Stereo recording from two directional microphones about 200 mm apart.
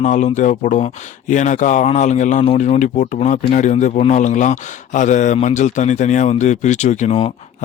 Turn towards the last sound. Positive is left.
turn(degrees=35)  # may be behind; listen again after turning